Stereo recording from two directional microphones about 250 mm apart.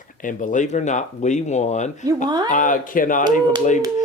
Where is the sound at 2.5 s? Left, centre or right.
Left.